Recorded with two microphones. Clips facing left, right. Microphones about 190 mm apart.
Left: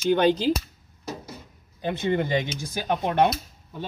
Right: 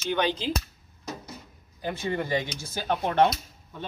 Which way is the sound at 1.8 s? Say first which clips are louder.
Left 5 dB; 20° left (ahead or behind).